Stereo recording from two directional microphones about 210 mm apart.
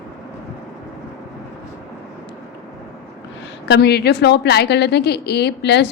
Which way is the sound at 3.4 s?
55° left (ahead or behind).